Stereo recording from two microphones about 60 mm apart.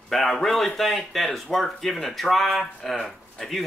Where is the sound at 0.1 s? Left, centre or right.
Centre.